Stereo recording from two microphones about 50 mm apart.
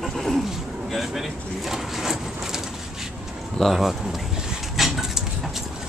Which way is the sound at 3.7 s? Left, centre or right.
Centre.